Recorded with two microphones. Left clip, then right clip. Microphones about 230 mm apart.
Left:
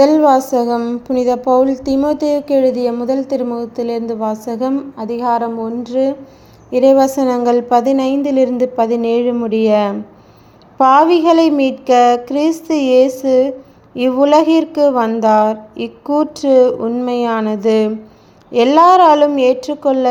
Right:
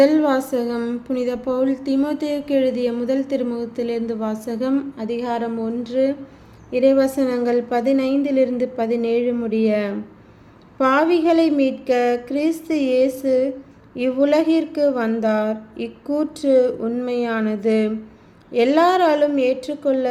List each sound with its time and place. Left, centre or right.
0.0 s speech: centre